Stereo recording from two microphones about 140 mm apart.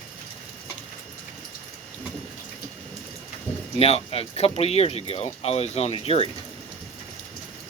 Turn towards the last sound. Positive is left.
turn(degrees=45)  # may be behind; listen again after turning